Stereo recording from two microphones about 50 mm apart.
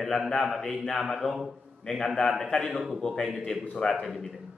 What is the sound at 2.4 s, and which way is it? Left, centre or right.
A man's voice, centre.